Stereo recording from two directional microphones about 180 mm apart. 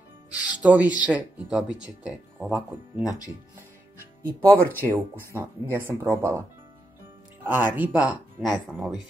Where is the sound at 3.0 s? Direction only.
20° left (ahead or behind).